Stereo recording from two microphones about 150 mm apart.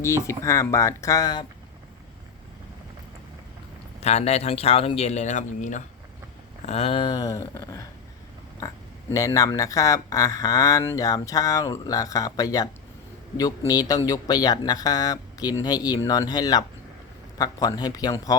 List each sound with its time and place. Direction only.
0.0 s speech: 20° left (ahead or behind)
4.0 s speech: 45° left (ahead or behind)
6.7 s speech: 40° left (ahead or behind); by 7.9 s 20° left (ahead or behind)
9.1 s speech: 25° left (ahead or behind)
13.7 s speech: 25° left (ahead or behind)